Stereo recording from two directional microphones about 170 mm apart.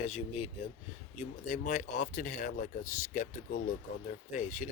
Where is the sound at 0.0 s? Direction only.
40° left (ahead or behind).